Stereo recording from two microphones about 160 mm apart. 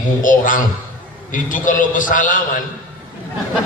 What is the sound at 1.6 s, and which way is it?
Speech, 55° left (ahead or behind).